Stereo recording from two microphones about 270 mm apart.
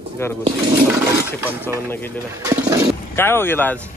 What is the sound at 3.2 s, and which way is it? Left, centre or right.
Speech, centre.